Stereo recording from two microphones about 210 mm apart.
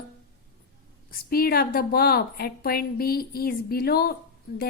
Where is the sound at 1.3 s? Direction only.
45° left (ahead or behind).